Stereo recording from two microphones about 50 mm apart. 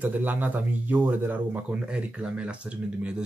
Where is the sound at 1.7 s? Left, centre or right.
Right.